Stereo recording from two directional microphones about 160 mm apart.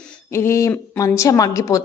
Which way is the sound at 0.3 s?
15° left (ahead or behind).